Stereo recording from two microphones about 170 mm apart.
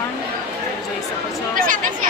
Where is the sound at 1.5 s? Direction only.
50° right (ahead or behind).